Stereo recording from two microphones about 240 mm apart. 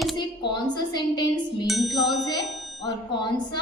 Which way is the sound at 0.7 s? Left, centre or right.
Centre.